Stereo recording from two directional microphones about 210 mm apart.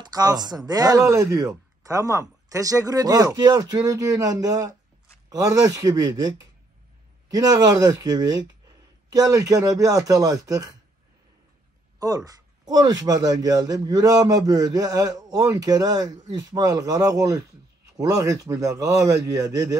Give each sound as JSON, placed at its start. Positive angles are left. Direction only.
{"t": 0.0, "sound": "a man's voice", "side_deg": -20}
{"t": 12.6, "sound": "a man's voice", "side_deg": -20}